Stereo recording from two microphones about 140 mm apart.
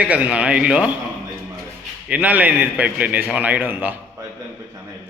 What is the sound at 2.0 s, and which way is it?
A man's voice, 10° right (ahead or behind).